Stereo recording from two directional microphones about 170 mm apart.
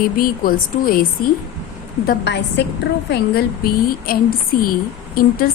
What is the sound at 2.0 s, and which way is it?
Speech, 90° left.